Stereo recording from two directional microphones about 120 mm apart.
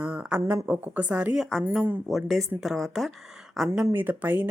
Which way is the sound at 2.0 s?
Centre (ahead or behind).